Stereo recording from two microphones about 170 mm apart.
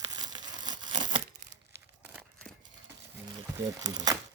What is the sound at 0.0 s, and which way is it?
Tearing, 25° right (ahead or behind).